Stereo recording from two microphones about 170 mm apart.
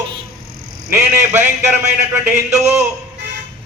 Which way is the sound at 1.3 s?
15° right (ahead or behind).